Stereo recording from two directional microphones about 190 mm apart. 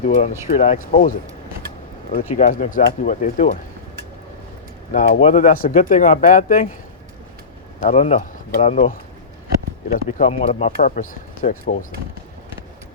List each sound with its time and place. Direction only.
0.0 s speech: 40° left (ahead or behind)
2.3 s speech: 40° left (ahead or behind)
4.9 s speech: 45° left (ahead or behind)
7.8 s speech: 35° left (ahead or behind)
10.8 s speech: 45° left (ahead or behind)